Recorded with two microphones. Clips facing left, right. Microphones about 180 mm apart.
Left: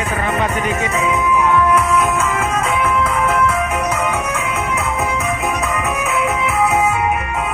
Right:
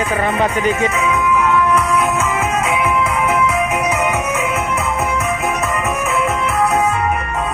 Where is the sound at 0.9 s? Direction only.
30° left (ahead or behind).